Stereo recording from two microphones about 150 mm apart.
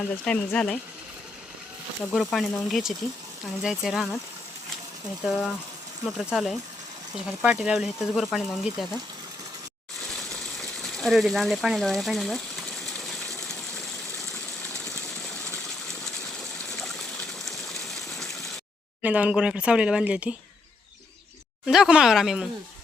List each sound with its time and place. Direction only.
0.3 s speech: 10° left (ahead or behind)
2.1 s speech: centre (ahead or behind)
5.2 s speech: centre (ahead or behind)
10.6 s speech: centre (ahead or behind)
16.7 s a sound: centre (ahead or behind)
19.0 s speech: 10° right (ahead or behind)
21.7 s speech: 5° right (ahead or behind)